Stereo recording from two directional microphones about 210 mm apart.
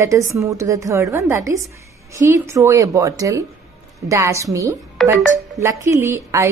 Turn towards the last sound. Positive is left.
turn(degrees=-15)  # may be behind; listen again after turning